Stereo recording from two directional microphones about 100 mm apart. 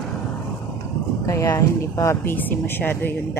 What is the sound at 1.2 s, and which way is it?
Speech, 30° left (ahead or behind).